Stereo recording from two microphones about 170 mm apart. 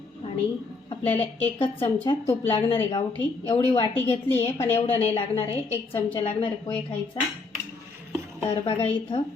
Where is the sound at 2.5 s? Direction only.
30° left (ahead or behind).